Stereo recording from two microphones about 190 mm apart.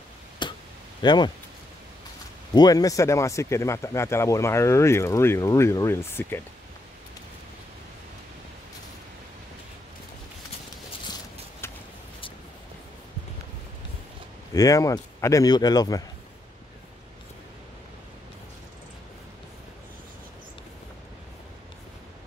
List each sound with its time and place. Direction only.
0.4 s a sound: 25° left (ahead or behind)
1.0 s speech: 25° left (ahead or behind)
2.5 s speech: 20° left (ahead or behind)
11.6 s vehicle: 10° left (ahead or behind)
14.5 s speech: 15° left (ahead or behind)